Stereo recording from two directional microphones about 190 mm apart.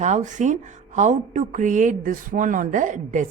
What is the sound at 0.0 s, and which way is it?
Speech, 40° right (ahead or behind).